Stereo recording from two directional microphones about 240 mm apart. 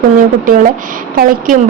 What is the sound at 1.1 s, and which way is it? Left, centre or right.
Speech, right.